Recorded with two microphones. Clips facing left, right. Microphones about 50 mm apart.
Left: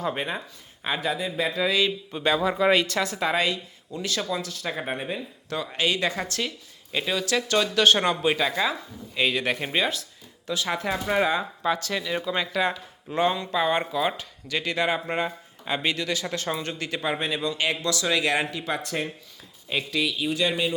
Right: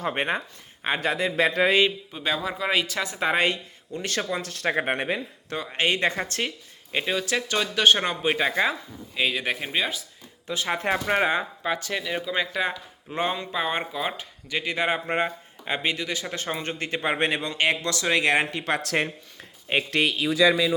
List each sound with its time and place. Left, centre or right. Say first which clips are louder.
0.2 s a man's voice: right 4 dB; right
1.1 s speech: right 4 dB; right
2.1 s speech: left 4 dB; centre
3.1 s speech: right 1 dB; right
3.3 s speech: right 2 dB; right
5.7 s speech: right 2 dB; right
6.9 s speech: even; right
9.1 s speech: left 1 dB; centre
10.0 s a sound: left 1 dB; right
11.0 s speech: left 2 dB; right
11.6 s speech: left 1 dB; centre; by 17.2 s right
17.2 s speech: right 2 dB; right
18.8 s speech: right 4 dB; right
19.7 s speech: right 3 dB; right